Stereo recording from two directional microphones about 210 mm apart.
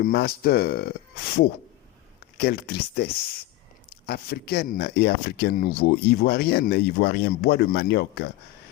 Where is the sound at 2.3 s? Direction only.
50° left (ahead or behind).